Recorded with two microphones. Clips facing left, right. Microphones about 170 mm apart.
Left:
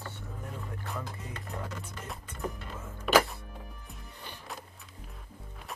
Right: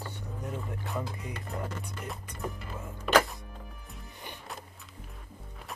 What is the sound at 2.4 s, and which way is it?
Speech, centre (ahead or behind).